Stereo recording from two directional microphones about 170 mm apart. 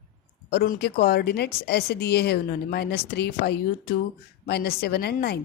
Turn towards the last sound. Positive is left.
turn(degrees=70)  # may be behind; listen again after turning